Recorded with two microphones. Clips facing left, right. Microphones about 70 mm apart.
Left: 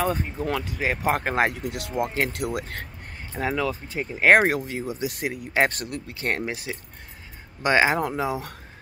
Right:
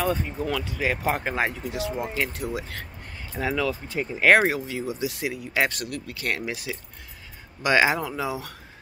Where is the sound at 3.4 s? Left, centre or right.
Left.